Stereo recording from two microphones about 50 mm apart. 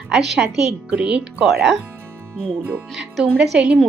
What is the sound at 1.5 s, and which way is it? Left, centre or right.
Speech, centre.